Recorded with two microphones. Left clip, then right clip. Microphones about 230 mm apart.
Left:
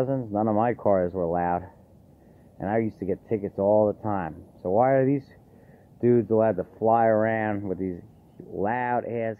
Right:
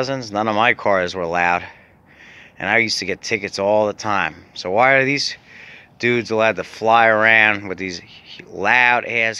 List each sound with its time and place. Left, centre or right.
0.2 s speech: centre
3.6 s speech: right
4.0 s speech: centre